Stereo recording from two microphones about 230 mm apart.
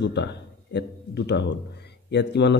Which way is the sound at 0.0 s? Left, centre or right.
Left.